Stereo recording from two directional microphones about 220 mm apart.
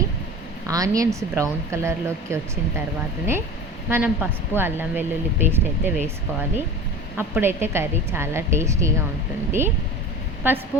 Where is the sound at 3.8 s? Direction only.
10° right (ahead or behind).